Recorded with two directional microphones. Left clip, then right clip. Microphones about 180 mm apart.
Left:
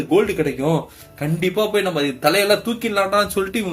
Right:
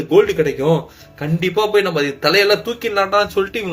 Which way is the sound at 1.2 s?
40° left (ahead or behind).